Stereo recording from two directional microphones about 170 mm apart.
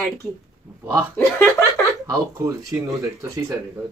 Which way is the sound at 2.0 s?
20° right (ahead or behind).